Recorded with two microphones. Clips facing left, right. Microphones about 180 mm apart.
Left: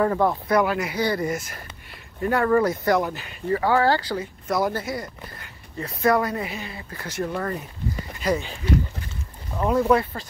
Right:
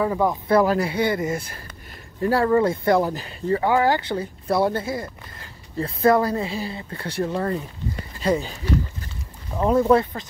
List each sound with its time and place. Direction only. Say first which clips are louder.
0.0 s speech: left 1 dB; 10° right (ahead or behind)
0.5 s speech: right 3 dB; 30° right (ahead or behind)
3.7 s speech: right 1 dB; 15° right (ahead or behind); by 8.5 s 35° right (ahead or behind)
9.6 s speech: right 2 dB; 25° right (ahead or behind)